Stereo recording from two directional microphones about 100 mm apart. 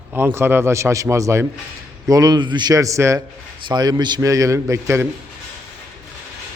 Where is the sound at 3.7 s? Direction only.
45° right (ahead or behind).